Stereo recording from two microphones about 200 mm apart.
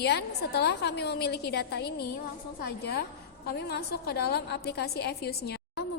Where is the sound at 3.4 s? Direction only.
55° left (ahead or behind).